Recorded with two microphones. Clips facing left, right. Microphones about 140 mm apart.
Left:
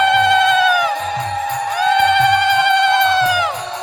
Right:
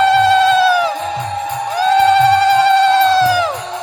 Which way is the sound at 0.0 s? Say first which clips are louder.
Right 3 dB; 30° right (ahead or behind).